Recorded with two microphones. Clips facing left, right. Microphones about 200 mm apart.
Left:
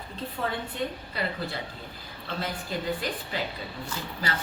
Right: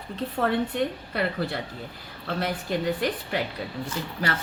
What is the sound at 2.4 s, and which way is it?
A woman's voice, 70° right (ahead or behind).